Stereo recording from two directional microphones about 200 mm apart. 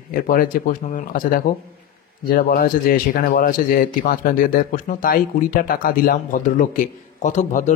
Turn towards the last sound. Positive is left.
turn(degrees=40)  # may be behind; listen again after turning